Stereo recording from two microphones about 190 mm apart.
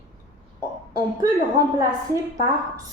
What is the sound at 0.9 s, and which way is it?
Speech, 20° right (ahead or behind).